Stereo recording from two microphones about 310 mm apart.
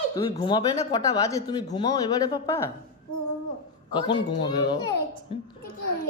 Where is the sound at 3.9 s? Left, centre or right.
Centre.